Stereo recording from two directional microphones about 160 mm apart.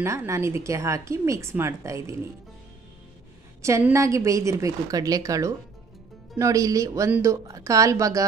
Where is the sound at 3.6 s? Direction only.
20° right (ahead or behind).